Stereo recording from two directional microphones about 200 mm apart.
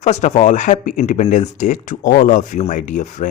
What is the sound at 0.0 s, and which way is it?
Speech, 35° left (ahead or behind).